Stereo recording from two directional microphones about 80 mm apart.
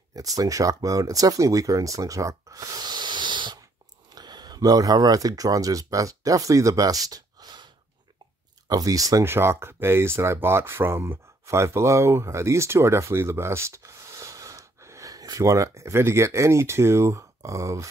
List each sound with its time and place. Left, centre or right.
0.1 s speech: right
4.1 s speech: right
8.6 s speech: right
9.2 s speech: right